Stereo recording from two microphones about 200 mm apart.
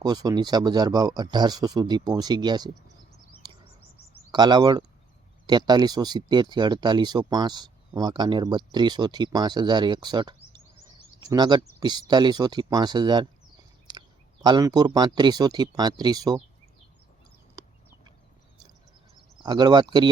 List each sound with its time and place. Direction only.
0.0 s speech: 20° right (ahead or behind)
3.4 s bird: 25° right (ahead or behind)
4.3 s speech: 20° right (ahead or behind)
14.4 s speech: 20° right (ahead or behind)
19.4 s speech: 20° right (ahead or behind)